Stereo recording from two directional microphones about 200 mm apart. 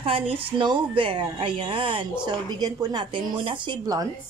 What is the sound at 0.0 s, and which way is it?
A woman's voice, 25° right (ahead or behind).